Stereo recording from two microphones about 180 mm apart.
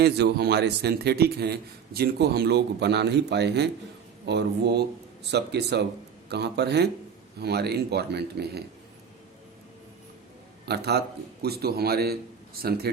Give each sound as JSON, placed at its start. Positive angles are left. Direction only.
{"t": 0.0, "sound": "a man's voice", "side_deg": -65}
{"t": 10.7, "sound": "a man's voice", "side_deg": -65}